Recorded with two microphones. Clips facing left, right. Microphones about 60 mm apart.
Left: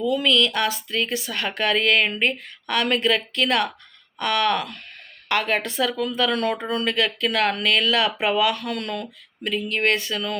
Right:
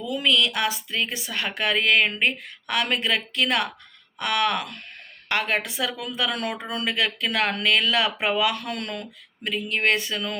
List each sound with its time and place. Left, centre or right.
0.1 s speech: right